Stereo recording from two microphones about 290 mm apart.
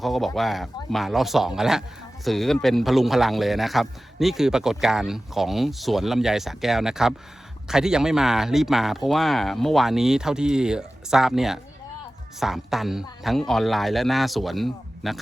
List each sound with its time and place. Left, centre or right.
0.0 s a man's voice: centre